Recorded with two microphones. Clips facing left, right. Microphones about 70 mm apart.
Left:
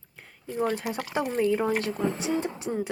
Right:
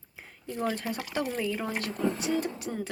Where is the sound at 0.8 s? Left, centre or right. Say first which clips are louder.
Left 3 dB; centre.